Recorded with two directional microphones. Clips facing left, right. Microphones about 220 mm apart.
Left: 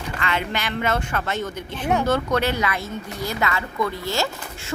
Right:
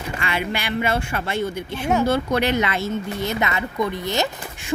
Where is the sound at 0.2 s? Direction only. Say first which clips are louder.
Even; 10° right (ahead or behind).